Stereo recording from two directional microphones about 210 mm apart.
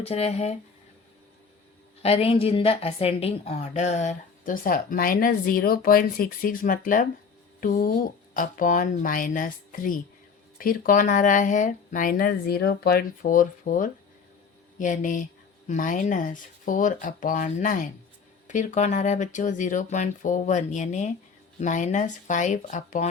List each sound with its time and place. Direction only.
0.0 s a woman's voice: 30° left (ahead or behind)
2.0 s a woman's voice: 30° left (ahead or behind)